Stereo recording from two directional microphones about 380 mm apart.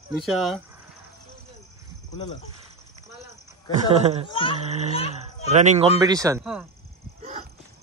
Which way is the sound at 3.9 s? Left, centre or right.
Centre.